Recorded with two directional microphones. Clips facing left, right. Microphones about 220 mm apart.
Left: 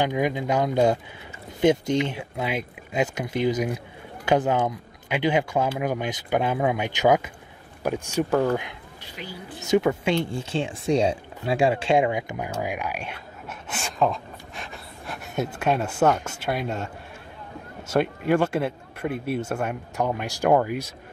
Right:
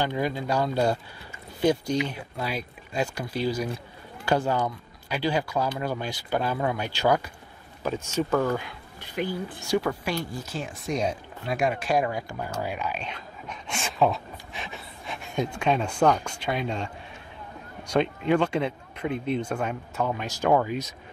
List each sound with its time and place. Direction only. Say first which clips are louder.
0.0 s speech: left 3 dB; 15° left (ahead or behind)
9.0 s speech: right 9 dB; 50° right (ahead or behind)
9.6 s speech: left 7 dB; 20° left (ahead or behind)